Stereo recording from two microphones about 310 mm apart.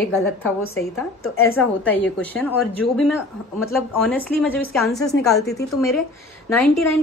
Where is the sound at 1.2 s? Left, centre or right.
Left.